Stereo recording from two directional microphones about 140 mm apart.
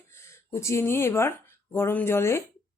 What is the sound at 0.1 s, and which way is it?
Speech, 20° left (ahead or behind).